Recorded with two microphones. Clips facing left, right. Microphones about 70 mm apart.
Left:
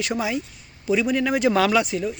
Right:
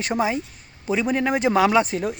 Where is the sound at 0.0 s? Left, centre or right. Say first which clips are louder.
Right 2 dB; right.